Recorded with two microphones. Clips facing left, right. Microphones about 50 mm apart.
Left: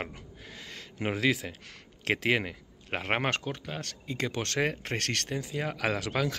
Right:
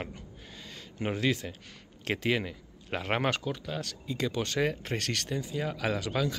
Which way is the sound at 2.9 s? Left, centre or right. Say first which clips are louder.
Even; left.